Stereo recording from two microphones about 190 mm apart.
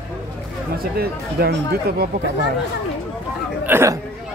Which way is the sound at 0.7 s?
55° right (ahead or behind).